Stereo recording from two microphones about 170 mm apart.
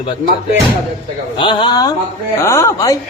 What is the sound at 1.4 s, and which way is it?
A man's voice, 25° left (ahead or behind).